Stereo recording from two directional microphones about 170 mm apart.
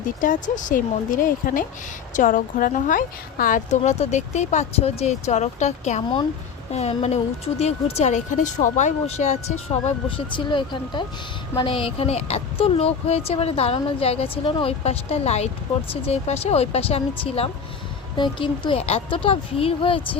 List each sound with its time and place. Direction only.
0.2 s a woman's voice: 50° left (ahead or behind)
10.3 s speech: 25° left (ahead or behind)